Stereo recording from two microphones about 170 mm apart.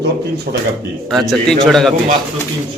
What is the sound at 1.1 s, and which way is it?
Speech, centre (ahead or behind).